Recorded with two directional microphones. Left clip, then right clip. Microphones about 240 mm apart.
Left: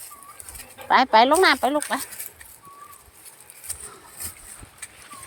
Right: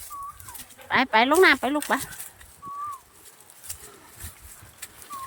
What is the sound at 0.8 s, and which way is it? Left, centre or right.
Speech, centre.